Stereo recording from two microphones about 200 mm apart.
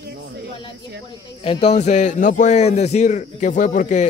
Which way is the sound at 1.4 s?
35° left (ahead or behind).